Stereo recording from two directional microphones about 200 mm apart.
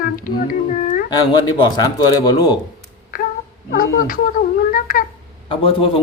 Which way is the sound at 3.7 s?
45° left (ahead or behind).